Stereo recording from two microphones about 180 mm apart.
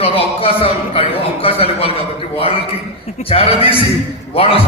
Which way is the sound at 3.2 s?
30° left (ahead or behind).